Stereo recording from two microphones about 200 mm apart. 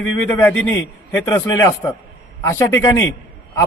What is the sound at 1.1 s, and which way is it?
A man's voice, 10° left (ahead or behind).